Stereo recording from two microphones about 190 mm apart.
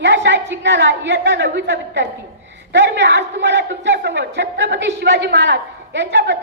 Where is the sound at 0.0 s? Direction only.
70° right (ahead or behind).